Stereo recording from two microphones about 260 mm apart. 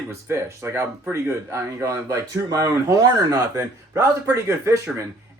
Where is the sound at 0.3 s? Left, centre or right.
Centre.